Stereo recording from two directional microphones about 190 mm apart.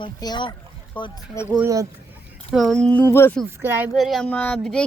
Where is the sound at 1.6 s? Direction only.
15° right (ahead or behind).